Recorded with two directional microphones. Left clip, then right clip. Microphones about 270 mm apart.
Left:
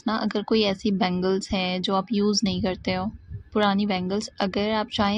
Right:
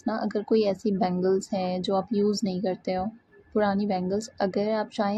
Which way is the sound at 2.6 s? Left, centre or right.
Left.